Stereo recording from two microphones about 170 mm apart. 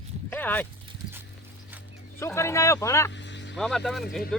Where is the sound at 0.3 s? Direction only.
10° left (ahead or behind).